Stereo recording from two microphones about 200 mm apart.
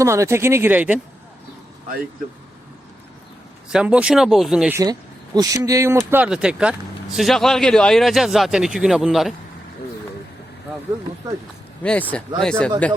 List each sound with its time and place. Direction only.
0.0 s speech: 15° right (ahead or behind)
3.7 s speech: 5° right (ahead or behind)
4.8 s speech: 20° right (ahead or behind); by 9.3 s centre (ahead or behind)
11.8 s speech: 5° left (ahead or behind)